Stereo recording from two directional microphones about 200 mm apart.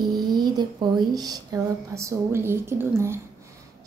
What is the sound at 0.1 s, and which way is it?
A woman's voice, 20° right (ahead or behind).